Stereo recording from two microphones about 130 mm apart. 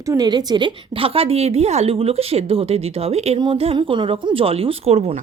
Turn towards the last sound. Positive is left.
turn(degrees=-55)  # may be behind; listen again after turning